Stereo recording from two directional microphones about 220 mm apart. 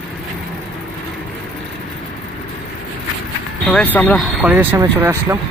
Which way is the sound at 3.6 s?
5° left (ahead or behind).